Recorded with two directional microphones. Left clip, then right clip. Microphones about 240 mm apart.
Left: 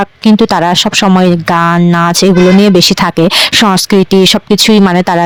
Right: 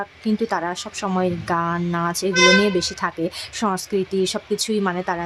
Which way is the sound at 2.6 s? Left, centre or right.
Left.